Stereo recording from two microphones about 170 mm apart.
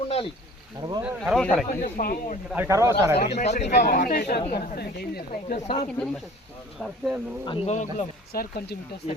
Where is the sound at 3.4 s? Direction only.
40° left (ahead or behind).